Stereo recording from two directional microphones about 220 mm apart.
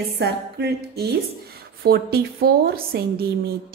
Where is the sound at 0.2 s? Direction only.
45° right (ahead or behind).